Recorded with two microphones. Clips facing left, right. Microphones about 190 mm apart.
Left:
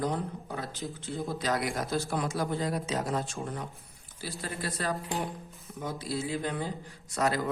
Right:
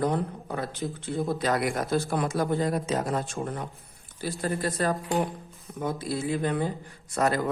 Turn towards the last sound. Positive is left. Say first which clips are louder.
# right 3 dB
turn(degrees=-50)  # may be behind; listen again after turning